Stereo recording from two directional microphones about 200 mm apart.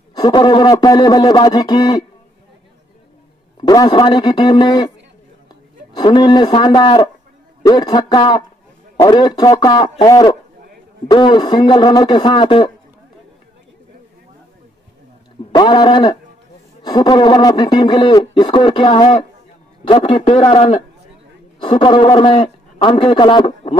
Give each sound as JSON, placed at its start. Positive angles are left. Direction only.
{"t": 0.1, "sound": "speech", "side_deg": 20}
{"t": 3.6, "sound": "speech", "side_deg": 20}
{"t": 5.9, "sound": "speech", "side_deg": 20}
{"t": 15.5, "sound": "a man's voice", "side_deg": 20}